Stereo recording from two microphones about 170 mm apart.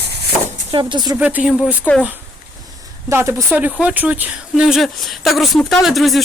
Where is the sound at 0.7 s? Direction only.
25° right (ahead or behind).